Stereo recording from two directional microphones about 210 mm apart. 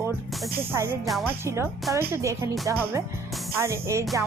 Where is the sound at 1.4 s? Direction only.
10° right (ahead or behind).